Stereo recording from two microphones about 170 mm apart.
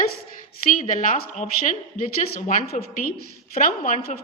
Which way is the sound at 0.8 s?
50° left (ahead or behind).